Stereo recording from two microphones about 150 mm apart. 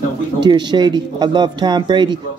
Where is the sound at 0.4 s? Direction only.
30° right (ahead or behind).